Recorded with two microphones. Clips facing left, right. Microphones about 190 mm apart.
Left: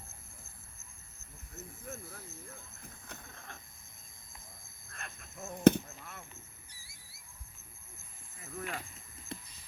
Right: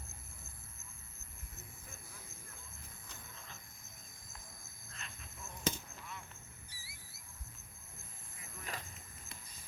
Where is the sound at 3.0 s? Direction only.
55° left (ahead or behind).